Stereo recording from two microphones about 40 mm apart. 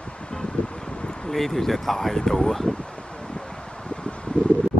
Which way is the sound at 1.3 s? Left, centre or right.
Centre.